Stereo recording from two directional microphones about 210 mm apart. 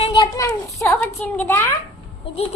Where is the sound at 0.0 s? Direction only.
25° left (ahead or behind).